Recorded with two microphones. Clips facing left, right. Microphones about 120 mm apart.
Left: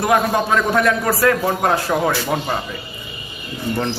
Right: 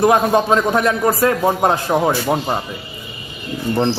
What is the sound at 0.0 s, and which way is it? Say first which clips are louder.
A man's voice: right 3 dB; 20° right (ahead or behind).